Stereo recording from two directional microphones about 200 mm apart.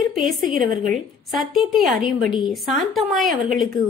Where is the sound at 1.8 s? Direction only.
45° right (ahead or behind).